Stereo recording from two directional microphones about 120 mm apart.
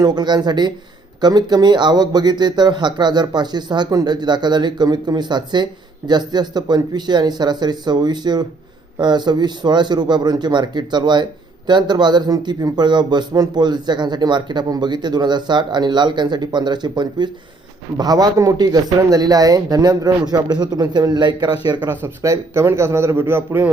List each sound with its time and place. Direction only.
0.0 s speech: 35° right (ahead or behind)
21.8 s a man's voice: 25° right (ahead or behind)